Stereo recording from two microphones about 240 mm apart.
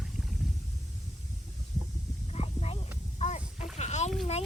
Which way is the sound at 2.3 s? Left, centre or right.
Left.